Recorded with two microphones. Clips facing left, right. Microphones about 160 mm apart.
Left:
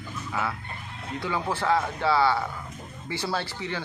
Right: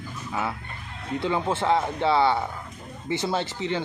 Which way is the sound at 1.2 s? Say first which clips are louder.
Right 3 dB; 25° right (ahead or behind).